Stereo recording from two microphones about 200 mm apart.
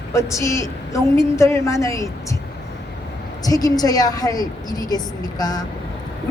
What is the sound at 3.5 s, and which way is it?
A woman's voice, 20° left (ahead or behind).